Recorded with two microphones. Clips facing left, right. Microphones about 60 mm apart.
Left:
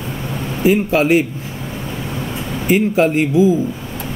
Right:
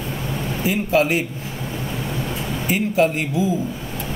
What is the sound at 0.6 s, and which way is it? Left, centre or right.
Speech, left.